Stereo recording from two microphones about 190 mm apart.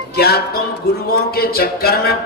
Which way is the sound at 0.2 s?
55° left (ahead or behind).